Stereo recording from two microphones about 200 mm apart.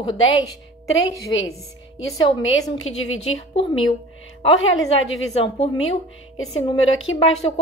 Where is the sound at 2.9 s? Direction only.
90° left.